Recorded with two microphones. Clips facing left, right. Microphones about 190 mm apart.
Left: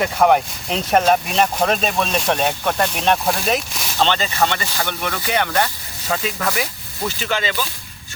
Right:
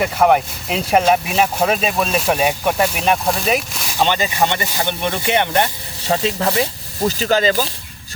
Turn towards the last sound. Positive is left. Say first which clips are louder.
# right 7 dB
turn(degrees=-40)  # may be behind; listen again after turning